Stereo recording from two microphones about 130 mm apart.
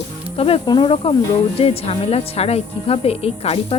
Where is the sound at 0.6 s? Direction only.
35° left (ahead or behind).